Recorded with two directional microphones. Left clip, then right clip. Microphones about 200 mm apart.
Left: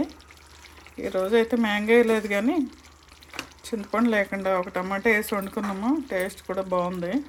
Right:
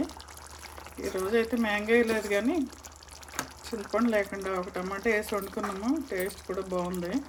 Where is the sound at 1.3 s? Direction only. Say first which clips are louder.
Left 4 dB; 30° left (ahead or behind).